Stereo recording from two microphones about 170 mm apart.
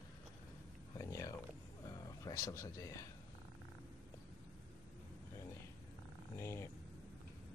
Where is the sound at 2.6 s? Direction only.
20° left (ahead or behind).